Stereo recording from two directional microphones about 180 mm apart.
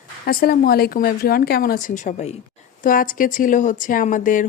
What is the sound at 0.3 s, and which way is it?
A woman's voice, 55° left (ahead or behind).